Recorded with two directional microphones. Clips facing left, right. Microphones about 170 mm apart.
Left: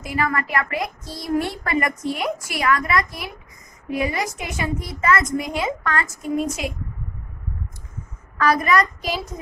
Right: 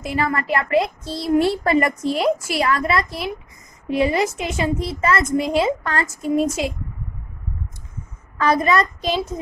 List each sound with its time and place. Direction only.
0.0 s speech: 30° right (ahead or behind)
8.4 s speech: 25° right (ahead or behind)